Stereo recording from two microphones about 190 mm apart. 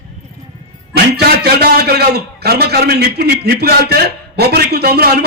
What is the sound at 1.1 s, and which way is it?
A man's voice, 55° right (ahead or behind).